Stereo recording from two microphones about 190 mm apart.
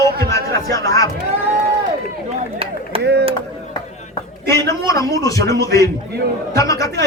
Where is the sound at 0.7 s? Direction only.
20° left (ahead or behind).